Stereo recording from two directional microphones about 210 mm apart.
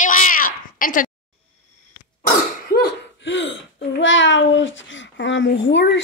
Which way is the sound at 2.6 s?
50° left (ahead or behind).